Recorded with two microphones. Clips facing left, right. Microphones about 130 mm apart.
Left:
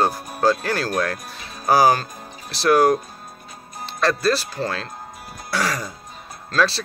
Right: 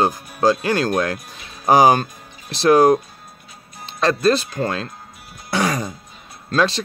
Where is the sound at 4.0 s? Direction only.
20° right (ahead or behind).